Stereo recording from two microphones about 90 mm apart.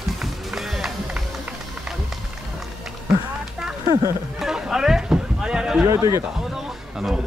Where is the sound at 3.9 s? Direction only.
35° right (ahead or behind).